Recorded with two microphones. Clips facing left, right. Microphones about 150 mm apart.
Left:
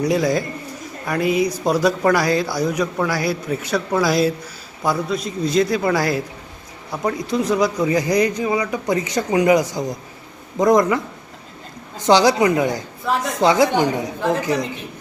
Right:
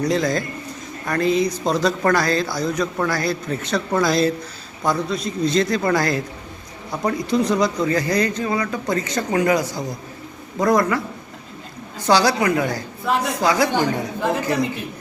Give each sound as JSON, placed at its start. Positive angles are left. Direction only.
{"t": 0.0, "sound": "a man's voice", "side_deg": 10}
{"t": 13.1, "sound": "a man's voice", "side_deg": 0}
{"t": 13.4, "sound": "a woman's voice", "side_deg": 20}